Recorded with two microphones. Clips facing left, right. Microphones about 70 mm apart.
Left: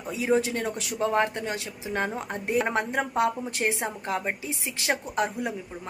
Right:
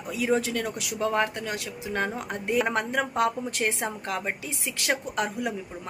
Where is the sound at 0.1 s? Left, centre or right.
Left.